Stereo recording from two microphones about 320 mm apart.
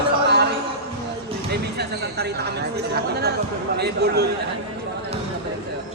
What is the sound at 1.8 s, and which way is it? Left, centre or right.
A man's voice, right.